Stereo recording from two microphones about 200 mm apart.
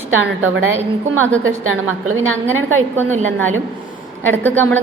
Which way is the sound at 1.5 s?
90° right.